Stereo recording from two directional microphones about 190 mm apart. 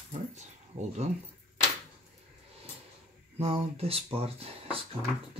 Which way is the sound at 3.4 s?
30° right (ahead or behind).